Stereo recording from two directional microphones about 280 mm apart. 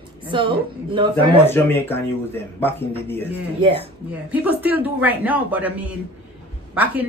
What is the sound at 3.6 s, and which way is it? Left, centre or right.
Speech, centre.